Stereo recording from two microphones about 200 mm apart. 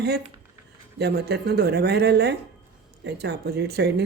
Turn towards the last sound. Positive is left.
turn(degrees=-55)  # may be behind; listen again after turning